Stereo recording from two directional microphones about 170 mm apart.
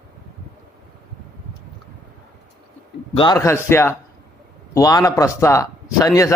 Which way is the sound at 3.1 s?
25° left (ahead or behind).